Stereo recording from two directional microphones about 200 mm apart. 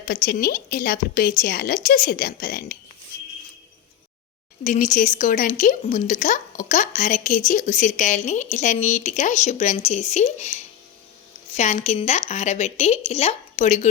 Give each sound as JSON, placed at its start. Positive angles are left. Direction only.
{"t": 0.1, "sound": "a woman's voice", "side_deg": 45}
{"t": 4.6, "sound": "speech", "side_deg": 40}